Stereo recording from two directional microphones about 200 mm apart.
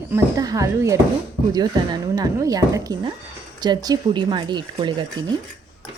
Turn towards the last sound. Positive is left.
turn(degrees=-25)  # may be behind; listen again after turning